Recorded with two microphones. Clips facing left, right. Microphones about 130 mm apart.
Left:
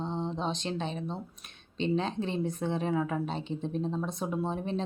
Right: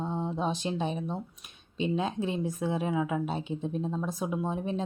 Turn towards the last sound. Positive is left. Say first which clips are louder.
# right 1 dB
turn(degrees=-5)  # may be behind; listen again after turning